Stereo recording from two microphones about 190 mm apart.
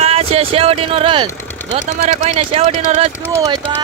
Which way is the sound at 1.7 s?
40° right (ahead or behind).